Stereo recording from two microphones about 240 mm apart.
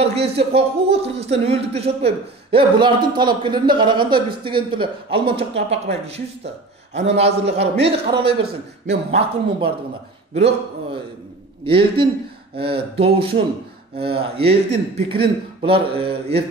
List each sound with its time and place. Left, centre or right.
0.0 s speech: right